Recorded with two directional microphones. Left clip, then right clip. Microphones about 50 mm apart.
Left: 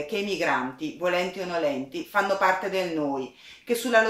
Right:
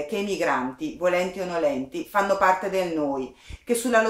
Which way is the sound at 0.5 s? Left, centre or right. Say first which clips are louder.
Right 1 dB; right.